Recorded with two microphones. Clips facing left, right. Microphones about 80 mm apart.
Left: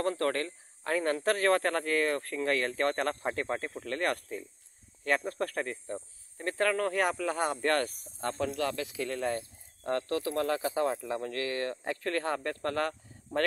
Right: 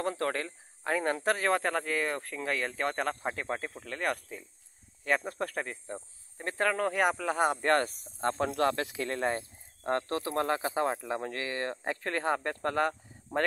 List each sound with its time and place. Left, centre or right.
0.0 s speech: centre
5.0 s speech: centre; by 8.5 s right
8.5 s speech: right; by 13.4 s centre